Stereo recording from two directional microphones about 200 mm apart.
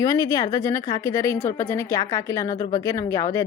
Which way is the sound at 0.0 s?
15° left (ahead or behind).